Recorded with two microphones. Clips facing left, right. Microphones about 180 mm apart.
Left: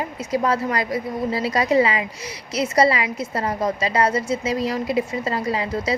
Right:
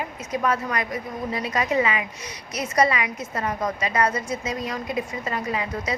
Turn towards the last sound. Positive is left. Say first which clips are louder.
# left 4 dB
turn(degrees=30)  # may be behind; listen again after turning